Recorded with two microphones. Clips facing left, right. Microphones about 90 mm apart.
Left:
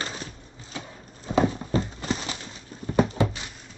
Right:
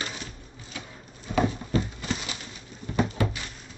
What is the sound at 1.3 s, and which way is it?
Clip-clop, 30° left (ahead or behind).